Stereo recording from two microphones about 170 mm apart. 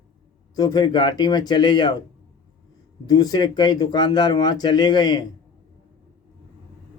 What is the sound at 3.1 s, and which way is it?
Speech, 20° left (ahead or behind).